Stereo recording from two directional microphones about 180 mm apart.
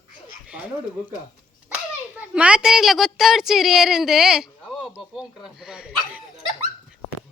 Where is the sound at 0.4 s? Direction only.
5° right (ahead or behind).